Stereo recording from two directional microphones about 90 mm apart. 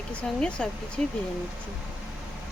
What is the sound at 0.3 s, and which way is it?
Speech, 10° left (ahead or behind).